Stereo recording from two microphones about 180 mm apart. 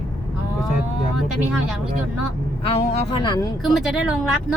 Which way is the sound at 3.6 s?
Centre (ahead or behind).